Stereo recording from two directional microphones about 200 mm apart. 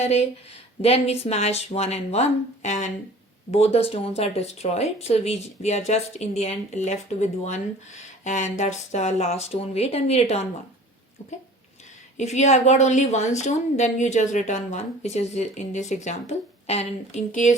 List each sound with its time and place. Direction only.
0.0 s a woman's voice: 30° left (ahead or behind)